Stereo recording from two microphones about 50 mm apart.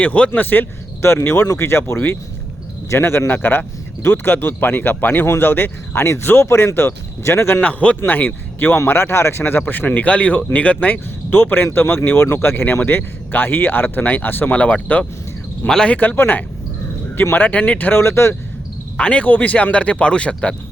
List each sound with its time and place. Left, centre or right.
0.0 s speech: left
0.3 s speech: left
1.2 s speech: left
6.0 s speech: left
7.6 s speech: left
8.0 s speech: left
8.3 s speech: left
14.5 s speech: left
15.6 s speech: centre
15.9 s speech: left
17.9 s speech: left
18.9 s speech: left